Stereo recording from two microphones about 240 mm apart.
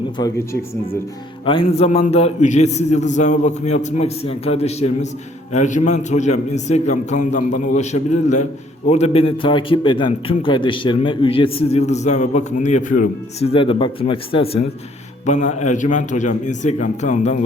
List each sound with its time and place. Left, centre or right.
0.2 s speech: centre
1.5 s a man's voice: left